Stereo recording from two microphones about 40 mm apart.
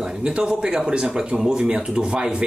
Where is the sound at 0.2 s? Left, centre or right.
Right.